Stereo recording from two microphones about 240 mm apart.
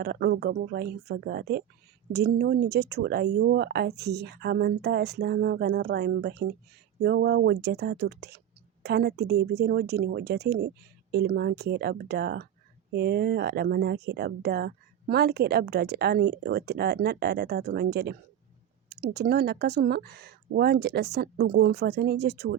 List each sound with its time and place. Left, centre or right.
0.0 s speech: right